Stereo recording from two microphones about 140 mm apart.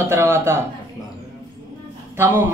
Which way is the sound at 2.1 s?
15° right (ahead or behind).